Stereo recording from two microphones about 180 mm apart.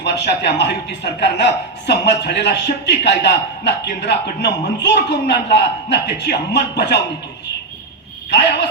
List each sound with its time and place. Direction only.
0.0 s a man's voice: 70° left (ahead or behind)